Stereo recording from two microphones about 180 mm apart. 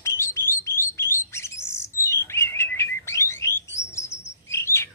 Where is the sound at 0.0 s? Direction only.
15° left (ahead or behind).